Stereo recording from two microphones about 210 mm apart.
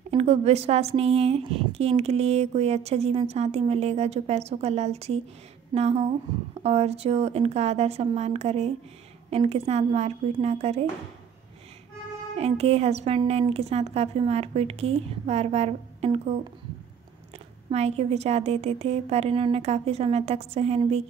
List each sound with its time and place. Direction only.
0.1 s a woman's voice: 30° right (ahead or behind)
12.4 s speech: 30° right (ahead or behind)
17.6 s speech: 30° right (ahead or behind)